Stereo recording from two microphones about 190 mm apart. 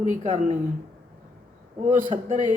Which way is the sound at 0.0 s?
40° right (ahead or behind).